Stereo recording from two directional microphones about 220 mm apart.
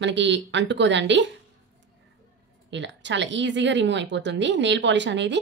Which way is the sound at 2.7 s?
55° right (ahead or behind).